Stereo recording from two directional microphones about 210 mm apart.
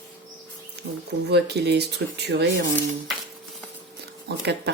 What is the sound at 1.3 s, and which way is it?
Speech, 50° right (ahead or behind).